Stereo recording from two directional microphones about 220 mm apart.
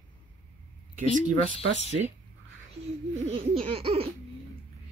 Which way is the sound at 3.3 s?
25° right (ahead or behind).